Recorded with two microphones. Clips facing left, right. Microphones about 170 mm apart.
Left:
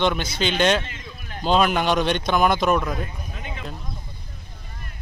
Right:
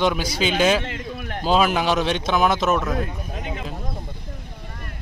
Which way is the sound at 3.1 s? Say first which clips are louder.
Right 5 dB; 65° right (ahead or behind).